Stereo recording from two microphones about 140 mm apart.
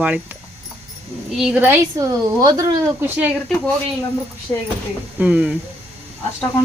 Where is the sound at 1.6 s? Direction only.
25° right (ahead or behind).